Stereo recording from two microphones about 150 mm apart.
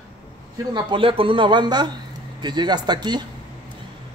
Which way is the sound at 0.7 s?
35° right (ahead or behind).